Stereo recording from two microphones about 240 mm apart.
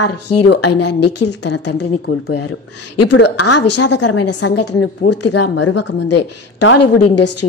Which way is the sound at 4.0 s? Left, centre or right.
Left.